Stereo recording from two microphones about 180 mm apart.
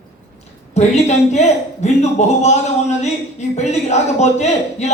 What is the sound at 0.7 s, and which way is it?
A woman's voice, 40° left (ahead or behind).